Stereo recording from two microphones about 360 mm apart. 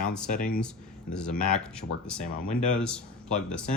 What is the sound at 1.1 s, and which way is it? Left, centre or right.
Speech, centre.